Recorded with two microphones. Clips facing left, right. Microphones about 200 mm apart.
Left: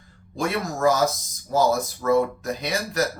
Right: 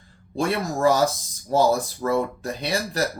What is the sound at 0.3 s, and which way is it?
Speech, 30° right (ahead or behind).